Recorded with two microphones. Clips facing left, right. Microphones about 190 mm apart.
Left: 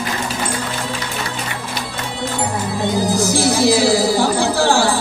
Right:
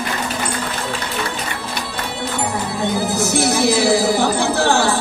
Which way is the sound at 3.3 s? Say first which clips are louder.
Left 1 dB; 20° right (ahead or behind).